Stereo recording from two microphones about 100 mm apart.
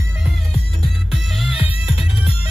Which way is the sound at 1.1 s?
5° right (ahead or behind).